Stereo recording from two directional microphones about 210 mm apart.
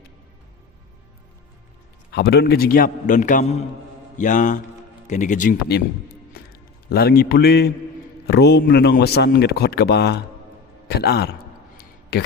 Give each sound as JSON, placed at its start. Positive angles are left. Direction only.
{"t": 2.0, "sound": "a man's voice", "side_deg": 50}